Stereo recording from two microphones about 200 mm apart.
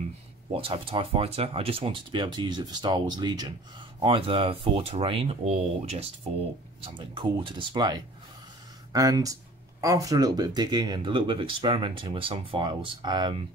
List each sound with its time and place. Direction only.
0.5 s speech: 25° right (ahead or behind)